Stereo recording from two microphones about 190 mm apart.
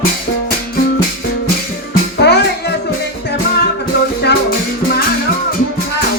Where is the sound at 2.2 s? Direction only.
60° left (ahead or behind).